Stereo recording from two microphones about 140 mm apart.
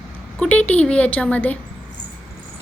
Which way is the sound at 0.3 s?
10° left (ahead or behind).